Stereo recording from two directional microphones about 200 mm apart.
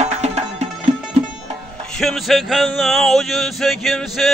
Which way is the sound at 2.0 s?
Centre (ahead or behind).